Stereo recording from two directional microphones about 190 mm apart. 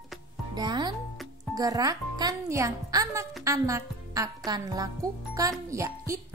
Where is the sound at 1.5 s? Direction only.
20° right (ahead or behind).